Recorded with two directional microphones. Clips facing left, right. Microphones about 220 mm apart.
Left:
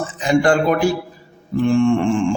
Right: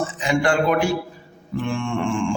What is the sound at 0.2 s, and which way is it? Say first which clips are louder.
A man's voice: left 5 dB; 40° left (ahead or behind).